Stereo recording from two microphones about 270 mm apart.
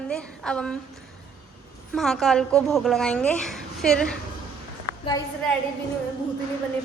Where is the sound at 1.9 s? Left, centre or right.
Centre.